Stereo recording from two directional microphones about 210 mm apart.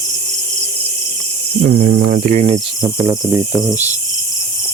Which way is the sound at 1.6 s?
45° right (ahead or behind).